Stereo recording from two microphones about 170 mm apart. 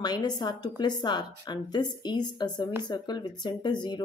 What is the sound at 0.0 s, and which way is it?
Speech, 25° left (ahead or behind).